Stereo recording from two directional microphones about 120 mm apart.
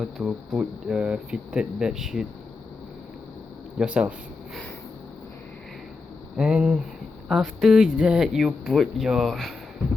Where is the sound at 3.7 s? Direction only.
10° right (ahead or behind).